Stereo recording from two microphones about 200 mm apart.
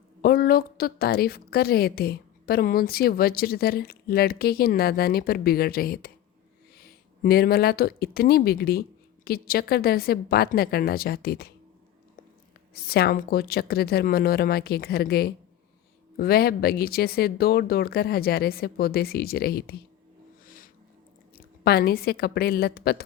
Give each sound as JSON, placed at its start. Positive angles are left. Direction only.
{"t": 0.2, "sound": "a woman's voice", "side_deg": 50}
{"t": 12.7, "sound": "a woman's voice", "side_deg": 50}
{"t": 20.4, "sound": "a sound", "side_deg": 45}
{"t": 21.6, "sound": "a woman's voice", "side_deg": 50}